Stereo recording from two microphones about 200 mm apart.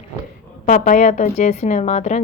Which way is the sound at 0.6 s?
40° left (ahead or behind).